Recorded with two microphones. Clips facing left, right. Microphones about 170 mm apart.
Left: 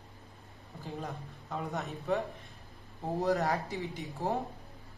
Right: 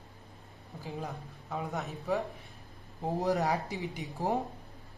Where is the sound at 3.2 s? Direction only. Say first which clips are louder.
Even; 15° right (ahead or behind).